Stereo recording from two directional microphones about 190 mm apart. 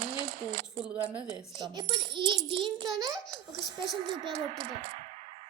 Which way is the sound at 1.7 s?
25° right (ahead or behind).